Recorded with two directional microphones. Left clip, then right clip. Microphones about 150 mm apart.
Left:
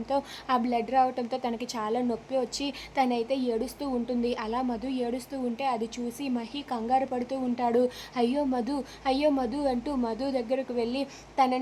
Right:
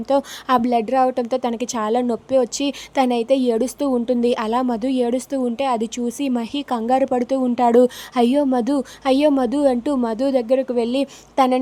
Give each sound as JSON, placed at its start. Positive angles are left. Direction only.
{"t": 0.1, "sound": "a woman's voice", "side_deg": -45}